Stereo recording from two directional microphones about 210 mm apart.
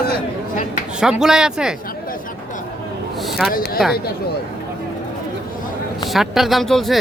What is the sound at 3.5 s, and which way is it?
Speech, 45° left (ahead or behind).